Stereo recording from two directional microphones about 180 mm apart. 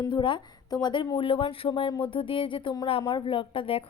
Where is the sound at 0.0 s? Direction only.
25° left (ahead or behind).